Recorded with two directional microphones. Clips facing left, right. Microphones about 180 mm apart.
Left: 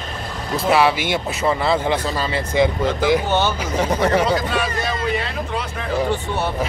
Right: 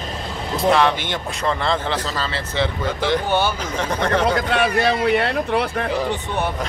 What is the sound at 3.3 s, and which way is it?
Speech, 10° right (ahead or behind).